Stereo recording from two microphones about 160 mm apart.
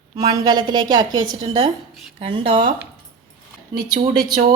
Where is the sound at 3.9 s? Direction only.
65° right (ahead or behind).